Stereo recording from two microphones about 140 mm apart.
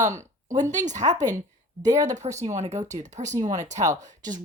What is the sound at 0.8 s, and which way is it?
Speech, 60° right (ahead or behind).